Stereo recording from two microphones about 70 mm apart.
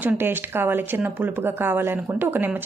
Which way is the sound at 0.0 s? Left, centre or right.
Right.